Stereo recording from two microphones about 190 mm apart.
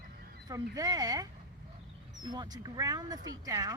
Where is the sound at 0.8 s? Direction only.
20° right (ahead or behind).